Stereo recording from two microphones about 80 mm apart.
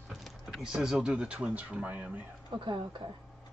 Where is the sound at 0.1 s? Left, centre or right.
Centre.